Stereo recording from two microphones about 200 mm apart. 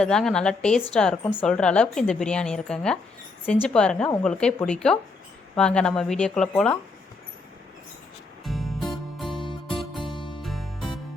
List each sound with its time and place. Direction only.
0.0 s a woman's voice: 5° left (ahead or behind)
8.4 s music: centre (ahead or behind)
9.5 s music: 25° left (ahead or behind)
10.4 s music: centre (ahead or behind)